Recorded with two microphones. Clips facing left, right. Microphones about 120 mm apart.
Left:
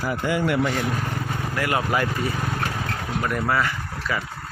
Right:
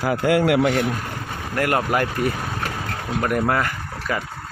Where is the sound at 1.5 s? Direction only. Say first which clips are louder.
Right 4 dB; 50° right (ahead or behind).